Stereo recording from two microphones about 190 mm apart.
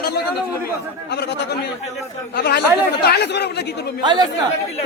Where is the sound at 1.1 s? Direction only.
60° left (ahead or behind).